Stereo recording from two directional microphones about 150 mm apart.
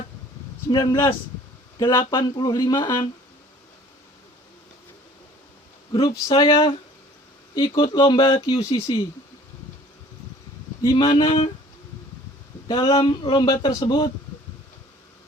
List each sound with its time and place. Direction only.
0.7 s a man's voice: 25° left (ahead or behind)
5.9 s a man's voice: 30° left (ahead or behind)
10.8 s a man's voice: 30° left (ahead or behind)
12.6 s a man's voice: 30° left (ahead or behind)